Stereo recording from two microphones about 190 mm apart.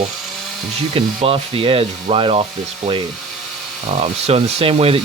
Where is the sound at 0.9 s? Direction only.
30° right (ahead or behind).